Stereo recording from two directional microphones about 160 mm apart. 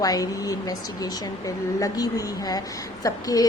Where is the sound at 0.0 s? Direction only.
20° left (ahead or behind).